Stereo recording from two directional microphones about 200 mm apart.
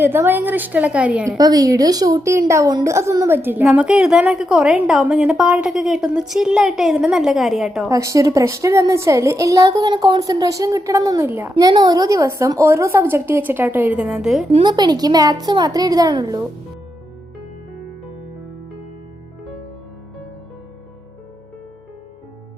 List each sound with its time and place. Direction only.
0.0 s a woman's voice: 10° right (ahead or behind)
1.4 s a woman's voice: 20° right (ahead or behind); by 7.9 s centre (ahead or behind)
7.9 s a woman's voice: 15° right (ahead or behind)
11.5 s a woman's voice: 20° right (ahead or behind); by 14.4 s centre (ahead or behind)
14.5 s a woman's voice: 20° right (ahead or behind)